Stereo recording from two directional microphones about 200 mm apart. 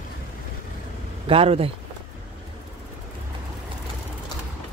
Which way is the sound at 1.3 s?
30° right (ahead or behind).